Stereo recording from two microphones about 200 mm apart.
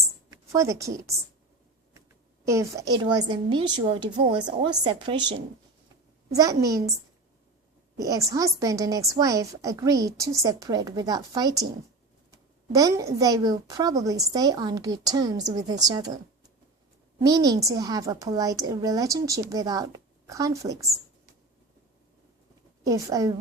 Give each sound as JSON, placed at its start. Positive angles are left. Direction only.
{"t": 0.3, "sound": "a woman's voice", "side_deg": -15}
{"t": 2.4, "sound": "a woman's voice", "side_deg": -15}
{"t": 7.9, "sound": "a woman's voice", "side_deg": -15}
{"t": 17.2, "sound": "a woman's voice", "side_deg": -20}
{"t": 22.8, "sound": "a woman's voice", "side_deg": -15}